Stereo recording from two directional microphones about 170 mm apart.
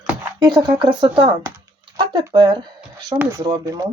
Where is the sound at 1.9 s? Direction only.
30° right (ahead or behind).